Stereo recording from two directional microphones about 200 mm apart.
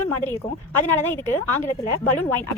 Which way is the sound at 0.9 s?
10° left (ahead or behind).